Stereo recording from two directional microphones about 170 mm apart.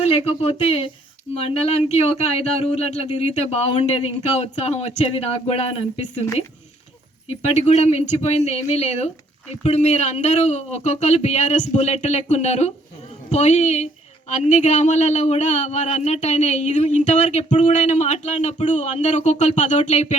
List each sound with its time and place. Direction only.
0.0 s speech: 35° left (ahead or behind)
7.3 s speech: 40° left (ahead or behind)